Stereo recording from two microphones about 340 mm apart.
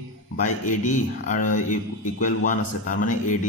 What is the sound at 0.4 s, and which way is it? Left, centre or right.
Speech, left.